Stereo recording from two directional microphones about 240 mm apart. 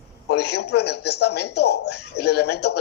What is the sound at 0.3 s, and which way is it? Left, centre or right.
A man's voice, left.